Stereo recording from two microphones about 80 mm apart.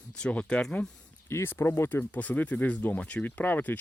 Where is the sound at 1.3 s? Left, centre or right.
Left.